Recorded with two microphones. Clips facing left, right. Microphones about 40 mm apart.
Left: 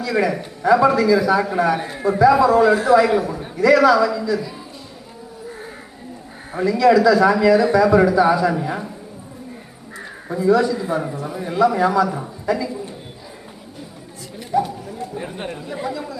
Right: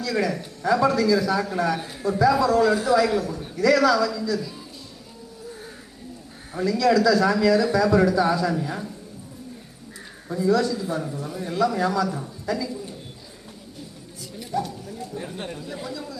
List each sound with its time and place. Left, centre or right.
0.0 s a man's voice: left
6.5 s a man's voice: left
10.3 s a man's voice: left
14.3 s chatter: centre